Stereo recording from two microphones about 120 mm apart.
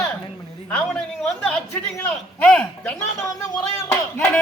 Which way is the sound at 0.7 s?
5° left (ahead or behind).